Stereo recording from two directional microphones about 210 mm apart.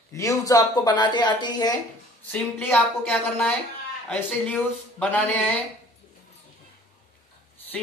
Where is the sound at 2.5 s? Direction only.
10° left (ahead or behind).